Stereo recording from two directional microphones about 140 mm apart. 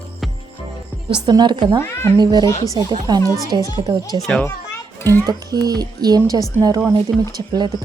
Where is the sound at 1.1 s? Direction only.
30° right (ahead or behind).